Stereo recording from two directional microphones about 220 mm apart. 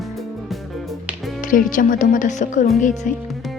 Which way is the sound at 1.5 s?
40° left (ahead or behind).